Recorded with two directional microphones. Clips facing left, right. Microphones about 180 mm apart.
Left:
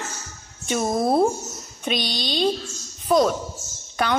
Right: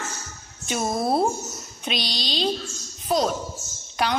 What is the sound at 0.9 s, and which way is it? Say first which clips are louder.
Speech: left 3 dB; 40° left (ahead or behind).